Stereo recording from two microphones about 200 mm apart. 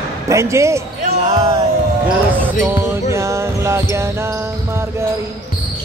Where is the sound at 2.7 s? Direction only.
10° right (ahead or behind).